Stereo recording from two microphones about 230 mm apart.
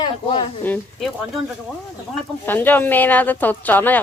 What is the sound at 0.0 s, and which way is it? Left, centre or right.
Speech, left.